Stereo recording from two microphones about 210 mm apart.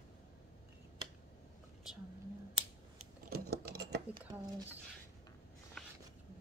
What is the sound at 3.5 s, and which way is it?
Typing, 50° right (ahead or behind).